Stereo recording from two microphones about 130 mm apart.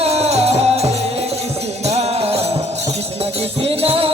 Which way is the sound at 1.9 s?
55° right (ahead or behind).